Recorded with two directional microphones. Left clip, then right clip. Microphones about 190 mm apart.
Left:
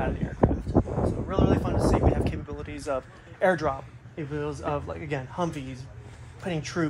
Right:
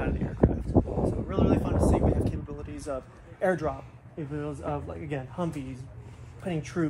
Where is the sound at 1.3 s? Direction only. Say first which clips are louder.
Left 2 dB; 5° left (ahead or behind).